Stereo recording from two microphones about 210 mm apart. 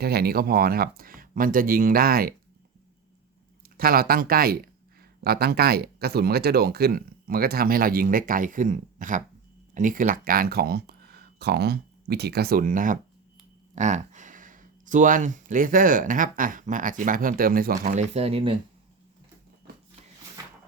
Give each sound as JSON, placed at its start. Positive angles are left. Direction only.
{"t": 0.0, "sound": "speech", "side_deg": -50}
{"t": 3.8, "sound": "speech", "side_deg": -45}